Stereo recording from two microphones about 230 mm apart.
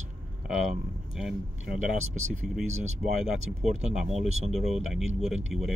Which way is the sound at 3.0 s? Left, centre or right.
Right.